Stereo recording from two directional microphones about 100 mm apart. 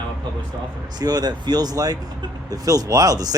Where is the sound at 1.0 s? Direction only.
40° right (ahead or behind).